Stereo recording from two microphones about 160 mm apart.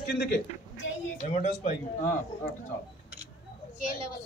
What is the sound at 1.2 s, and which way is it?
Speech, 50° left (ahead or behind).